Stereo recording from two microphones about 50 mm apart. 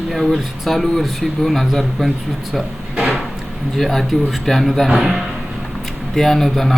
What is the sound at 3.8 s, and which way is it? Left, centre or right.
A man's voice, centre.